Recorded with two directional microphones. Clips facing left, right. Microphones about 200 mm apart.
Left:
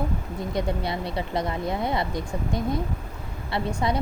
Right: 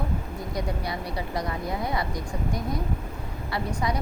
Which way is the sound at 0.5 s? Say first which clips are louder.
Left 4 dB; 25° left (ahead or behind).